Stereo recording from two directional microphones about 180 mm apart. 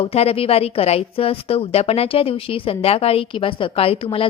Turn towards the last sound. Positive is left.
turn(degrees=30)  # may be behind; listen again after turning